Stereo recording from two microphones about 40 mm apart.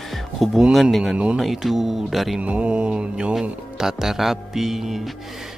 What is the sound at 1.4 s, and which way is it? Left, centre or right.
Speech, centre.